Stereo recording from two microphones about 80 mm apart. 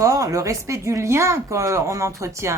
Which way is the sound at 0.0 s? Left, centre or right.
Right.